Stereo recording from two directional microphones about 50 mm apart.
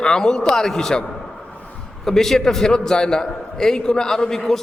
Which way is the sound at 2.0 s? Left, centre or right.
Centre.